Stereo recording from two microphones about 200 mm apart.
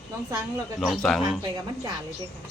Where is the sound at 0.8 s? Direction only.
Centre (ahead or behind).